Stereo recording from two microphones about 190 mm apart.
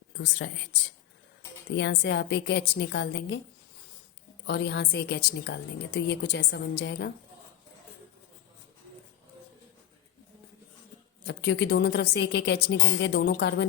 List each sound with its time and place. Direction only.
0.2 s a woman's voice: 70° left (ahead or behind)
4.4 s a woman's voice: 60° left (ahead or behind)
11.3 s a woman's voice: 60° left (ahead or behind)